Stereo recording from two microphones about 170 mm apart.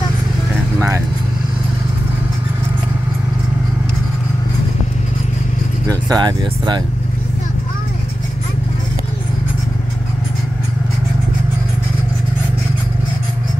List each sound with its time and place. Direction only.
0.7 s vehicle: 15° right (ahead or behind)
5.9 s speech: 25° right (ahead or behind)